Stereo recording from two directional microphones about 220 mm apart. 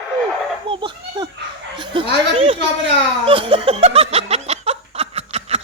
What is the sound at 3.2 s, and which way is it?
Laughter, 25° right (ahead or behind).